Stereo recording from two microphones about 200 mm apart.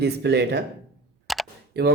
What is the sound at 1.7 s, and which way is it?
Speech, 55° right (ahead or behind).